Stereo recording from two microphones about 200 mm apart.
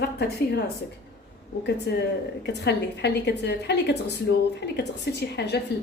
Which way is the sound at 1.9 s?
55° left (ahead or behind).